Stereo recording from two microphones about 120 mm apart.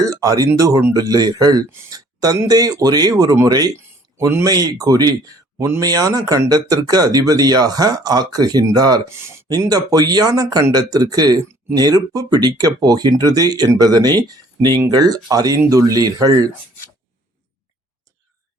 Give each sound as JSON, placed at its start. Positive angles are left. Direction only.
{"t": 0.0, "sound": "speech", "side_deg": -30}
{"t": 9.1, "sound": "speech", "side_deg": -20}
{"t": 9.5, "sound": "speech", "side_deg": -35}